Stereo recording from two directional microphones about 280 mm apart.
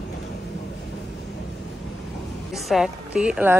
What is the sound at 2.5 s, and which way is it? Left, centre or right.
A woman's voice, centre.